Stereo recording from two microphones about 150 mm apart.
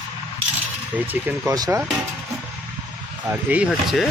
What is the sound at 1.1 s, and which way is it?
Speech, 10° right (ahead or behind).